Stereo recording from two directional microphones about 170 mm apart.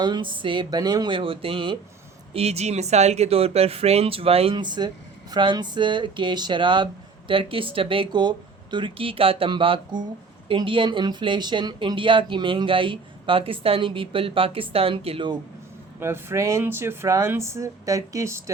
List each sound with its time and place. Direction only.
0.0 s speech: 25° right (ahead or behind)
16.0 s speech: 15° right (ahead or behind)